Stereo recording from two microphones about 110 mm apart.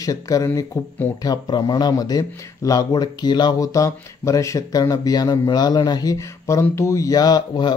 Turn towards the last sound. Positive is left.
turn(degrees=40)  # may be behind; listen again after turning